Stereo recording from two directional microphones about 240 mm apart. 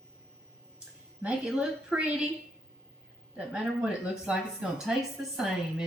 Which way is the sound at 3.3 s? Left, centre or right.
Centre.